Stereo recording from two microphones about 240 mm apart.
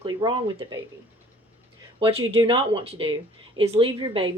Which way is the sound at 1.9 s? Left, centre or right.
Right.